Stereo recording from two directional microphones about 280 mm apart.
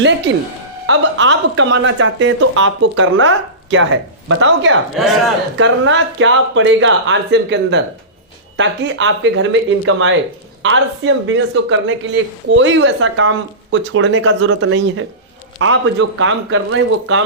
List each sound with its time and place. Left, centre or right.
0.9 s speech: right